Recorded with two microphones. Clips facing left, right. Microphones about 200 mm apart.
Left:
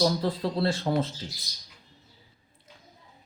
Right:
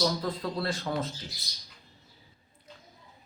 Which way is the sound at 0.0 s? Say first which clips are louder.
Left 4 dB; 30° left (ahead or behind).